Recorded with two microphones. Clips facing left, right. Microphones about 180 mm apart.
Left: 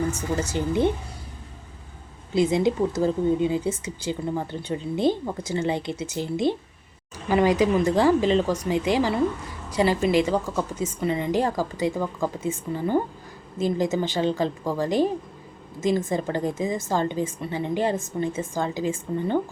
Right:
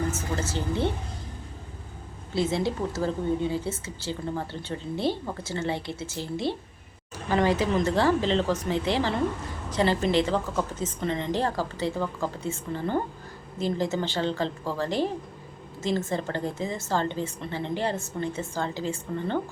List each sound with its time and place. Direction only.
0.3 s a woman's voice: 15° left (ahead or behind)
2.3 s a woman's voice: 15° left (ahead or behind)